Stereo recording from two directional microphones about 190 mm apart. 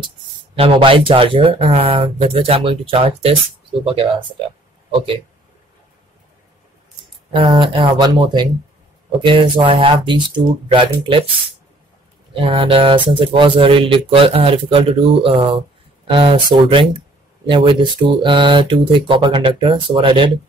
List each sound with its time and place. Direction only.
0.6 s speech: 30° right (ahead or behind)
7.3 s speech: 30° right (ahead or behind)
12.4 s speech: 30° right (ahead or behind)